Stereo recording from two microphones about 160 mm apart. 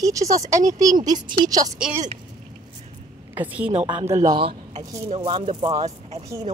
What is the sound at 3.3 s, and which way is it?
A woman's voice, 10° right (ahead or behind).